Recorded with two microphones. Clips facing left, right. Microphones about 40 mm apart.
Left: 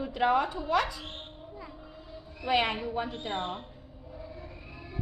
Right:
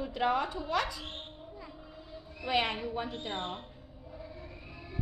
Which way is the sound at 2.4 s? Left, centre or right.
Centre.